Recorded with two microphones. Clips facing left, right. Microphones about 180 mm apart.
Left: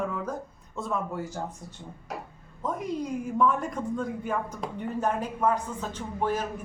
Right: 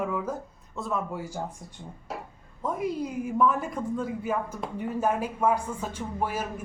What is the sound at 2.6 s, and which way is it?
A woman's voice, 5° right (ahead or behind).